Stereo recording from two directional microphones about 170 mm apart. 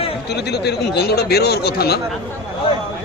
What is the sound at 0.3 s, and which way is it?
A man's voice, 75° left (ahead or behind).